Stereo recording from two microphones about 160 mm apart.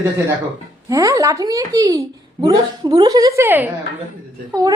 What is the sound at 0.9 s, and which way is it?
A child's voice, 20° right (ahead or behind).